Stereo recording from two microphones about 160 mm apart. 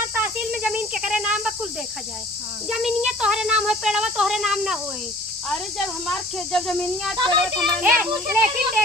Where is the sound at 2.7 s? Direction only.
5° right (ahead or behind).